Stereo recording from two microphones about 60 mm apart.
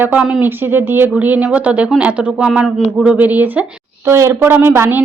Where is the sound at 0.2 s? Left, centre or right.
Centre.